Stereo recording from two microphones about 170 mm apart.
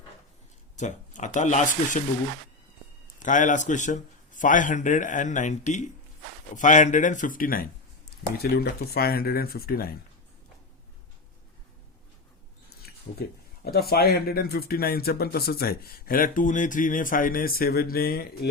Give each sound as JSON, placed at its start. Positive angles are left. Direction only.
{"t": 0.8, "sound": "a man's voice", "side_deg": 45}
{"t": 3.2, "sound": "a man's voice", "side_deg": 50}
{"t": 8.4, "sound": "speech", "side_deg": 65}
{"t": 12.8, "sound": "speech", "side_deg": 65}